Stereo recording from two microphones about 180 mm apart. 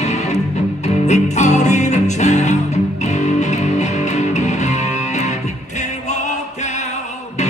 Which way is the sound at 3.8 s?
40° left (ahead or behind).